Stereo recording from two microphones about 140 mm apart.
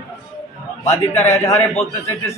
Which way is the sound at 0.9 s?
55° left (ahead or behind).